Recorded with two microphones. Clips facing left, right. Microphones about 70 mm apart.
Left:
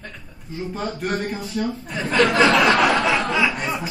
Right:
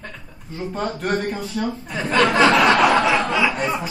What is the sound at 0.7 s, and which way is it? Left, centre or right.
Speech, centre.